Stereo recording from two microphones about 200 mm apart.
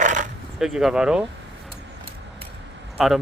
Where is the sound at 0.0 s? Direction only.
40° right (ahead or behind).